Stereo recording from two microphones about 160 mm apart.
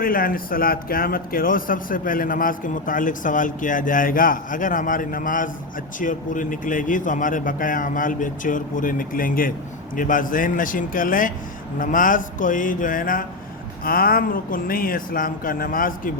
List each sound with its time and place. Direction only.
0.0 s speech: 65° left (ahead or behind)